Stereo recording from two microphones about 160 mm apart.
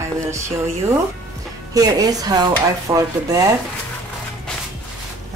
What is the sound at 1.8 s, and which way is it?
Speech, 20° right (ahead or behind).